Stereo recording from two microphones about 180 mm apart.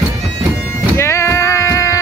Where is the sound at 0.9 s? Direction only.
15° left (ahead or behind).